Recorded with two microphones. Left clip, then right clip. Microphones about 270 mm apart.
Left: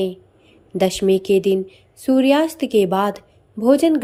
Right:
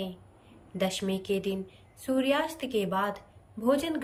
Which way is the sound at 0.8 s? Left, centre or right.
Centre.